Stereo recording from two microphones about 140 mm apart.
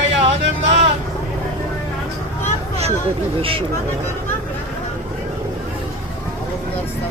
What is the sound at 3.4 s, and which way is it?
Speech, 40° right (ahead or behind).